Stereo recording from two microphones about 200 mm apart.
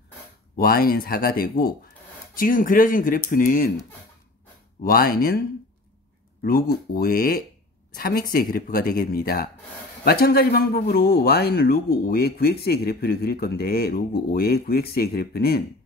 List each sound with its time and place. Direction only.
0.6 s speech: 45° left (ahead or behind)
4.8 s speech: 45° left (ahead or behind)
6.4 s speech: 45° left (ahead or behind)